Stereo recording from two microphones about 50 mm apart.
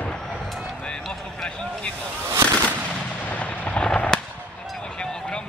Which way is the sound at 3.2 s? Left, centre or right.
Left.